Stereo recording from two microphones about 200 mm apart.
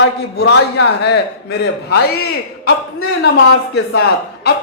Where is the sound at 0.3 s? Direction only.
55° left (ahead or behind).